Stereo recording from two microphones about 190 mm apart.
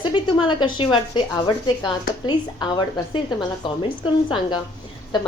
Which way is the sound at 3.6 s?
25° left (ahead or behind).